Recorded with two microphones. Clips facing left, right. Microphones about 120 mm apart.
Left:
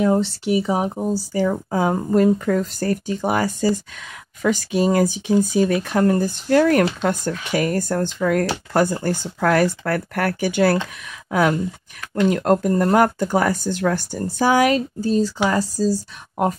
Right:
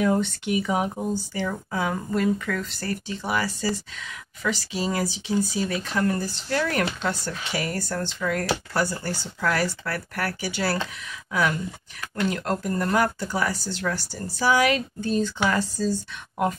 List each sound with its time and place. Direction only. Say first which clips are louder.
0.0 s speech: left 4 dB; 30° left (ahead or behind)